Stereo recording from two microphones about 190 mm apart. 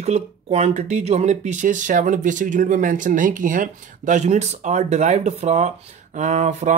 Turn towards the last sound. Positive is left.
turn(degrees=-40)  # may be behind; listen again after turning